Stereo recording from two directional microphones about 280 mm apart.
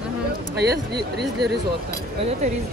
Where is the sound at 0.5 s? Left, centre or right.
Right.